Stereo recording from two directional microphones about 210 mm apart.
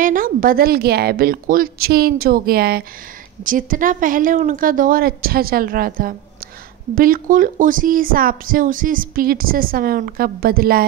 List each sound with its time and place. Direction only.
0.0 s speech: 40° right (ahead or behind)